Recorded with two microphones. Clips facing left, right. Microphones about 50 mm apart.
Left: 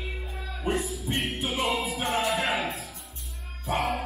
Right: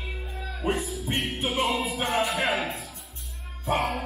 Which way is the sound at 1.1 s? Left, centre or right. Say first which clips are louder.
Right 1 dB; right.